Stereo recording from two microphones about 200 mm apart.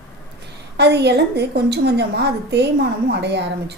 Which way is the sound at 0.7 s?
55° right (ahead or behind).